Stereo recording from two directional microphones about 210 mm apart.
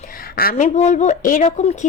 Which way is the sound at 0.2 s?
45° left (ahead or behind).